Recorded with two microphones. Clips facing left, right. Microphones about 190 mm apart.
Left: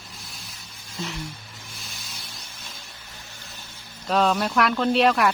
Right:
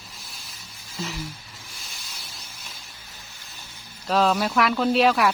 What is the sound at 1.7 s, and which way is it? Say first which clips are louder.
Spray: left 3 dB; centre (ahead or behind).